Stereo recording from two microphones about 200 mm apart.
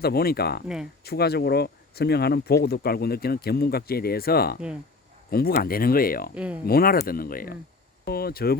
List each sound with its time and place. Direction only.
0.0 s speech: 50° left (ahead or behind)
6.3 s speech: 5° right (ahead or behind)
6.7 s speech: 50° left (ahead or behind)